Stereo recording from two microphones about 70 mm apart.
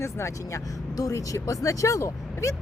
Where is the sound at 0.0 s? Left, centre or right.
Left.